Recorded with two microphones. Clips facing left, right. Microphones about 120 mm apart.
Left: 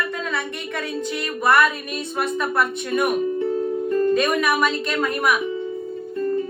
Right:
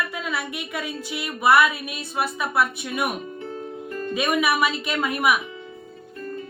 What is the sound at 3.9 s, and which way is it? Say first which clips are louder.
Music: left 12 dB; 25° left (ahead or behind).